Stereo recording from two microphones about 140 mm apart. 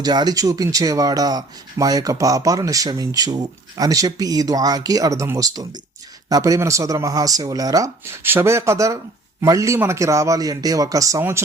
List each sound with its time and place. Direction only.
0.0 s speech: 30° right (ahead or behind)